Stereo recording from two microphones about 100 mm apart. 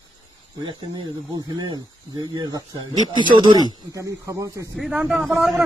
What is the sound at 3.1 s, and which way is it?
Speech, 50° right (ahead or behind).